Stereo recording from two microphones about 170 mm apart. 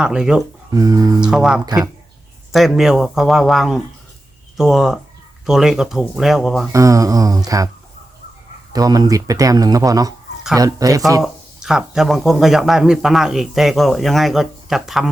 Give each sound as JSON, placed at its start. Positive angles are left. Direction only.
{"t": 0.0, "sound": "speech", "side_deg": -5}
{"t": 0.7, "sound": "speech", "side_deg": -20}
{"t": 1.2, "sound": "speech", "side_deg": -5}
{"t": 1.6, "sound": "speech", "side_deg": -25}
{"t": 2.5, "sound": "speech", "side_deg": 0}
{"t": 6.7, "sound": "speech", "side_deg": -20}
{"t": 8.7, "sound": "speech", "side_deg": -20}
{"t": 11.2, "sound": "speech", "side_deg": -5}